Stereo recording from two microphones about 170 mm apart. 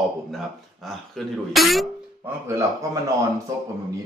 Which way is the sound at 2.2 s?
15° right (ahead or behind).